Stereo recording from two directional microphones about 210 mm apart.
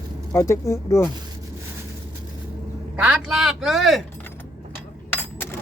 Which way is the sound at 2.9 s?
5° right (ahead or behind).